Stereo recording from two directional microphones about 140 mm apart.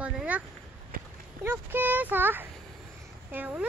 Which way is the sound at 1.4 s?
15° right (ahead or behind).